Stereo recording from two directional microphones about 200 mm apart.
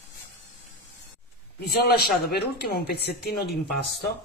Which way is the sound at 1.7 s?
50° left (ahead or behind).